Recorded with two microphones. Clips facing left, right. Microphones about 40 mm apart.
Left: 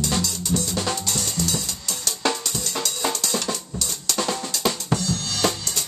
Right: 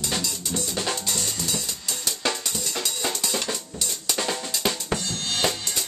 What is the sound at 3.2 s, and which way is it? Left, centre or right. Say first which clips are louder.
Drum: left 2 dB; centre.